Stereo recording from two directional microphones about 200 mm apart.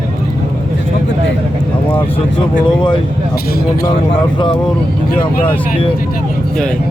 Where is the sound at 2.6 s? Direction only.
25° left (ahead or behind).